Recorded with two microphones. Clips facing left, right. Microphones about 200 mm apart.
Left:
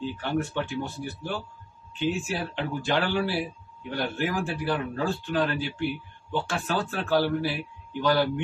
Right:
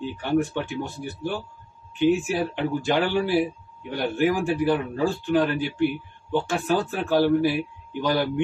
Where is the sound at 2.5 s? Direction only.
15° right (ahead or behind).